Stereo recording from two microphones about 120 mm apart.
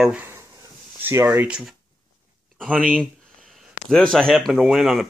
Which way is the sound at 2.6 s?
5° left (ahead or behind).